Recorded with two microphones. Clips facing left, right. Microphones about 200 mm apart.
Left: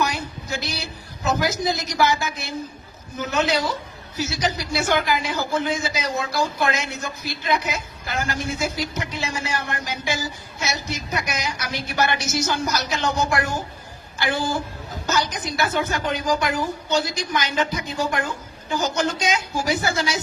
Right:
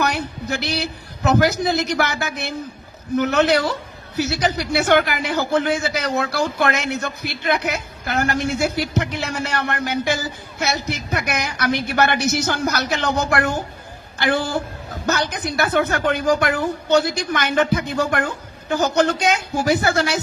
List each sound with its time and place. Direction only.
0.0 s a man's voice: 65° right (ahead or behind)